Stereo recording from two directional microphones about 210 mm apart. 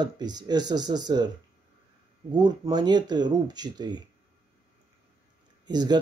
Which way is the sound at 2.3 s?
20° right (ahead or behind).